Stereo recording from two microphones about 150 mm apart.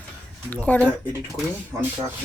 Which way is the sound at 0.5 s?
10° left (ahead or behind).